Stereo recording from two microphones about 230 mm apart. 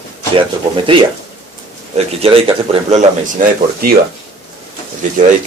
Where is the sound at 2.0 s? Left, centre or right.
Right.